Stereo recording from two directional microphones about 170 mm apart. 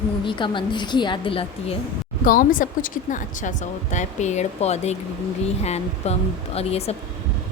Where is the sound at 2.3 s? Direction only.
55° left (ahead or behind).